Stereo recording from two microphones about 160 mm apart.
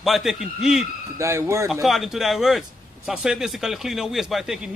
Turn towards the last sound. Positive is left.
turn(degrees=0)  # may be behind; listen again after turning